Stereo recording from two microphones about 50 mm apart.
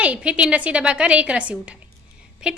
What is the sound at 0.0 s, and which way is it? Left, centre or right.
A woman's voice, right.